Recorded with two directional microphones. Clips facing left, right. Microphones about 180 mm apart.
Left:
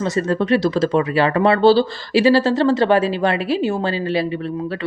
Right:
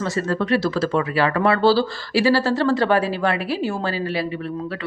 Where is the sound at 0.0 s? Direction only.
20° left (ahead or behind).